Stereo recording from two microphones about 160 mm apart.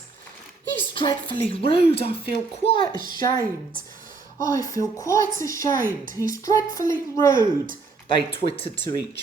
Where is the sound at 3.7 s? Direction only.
60° right (ahead or behind).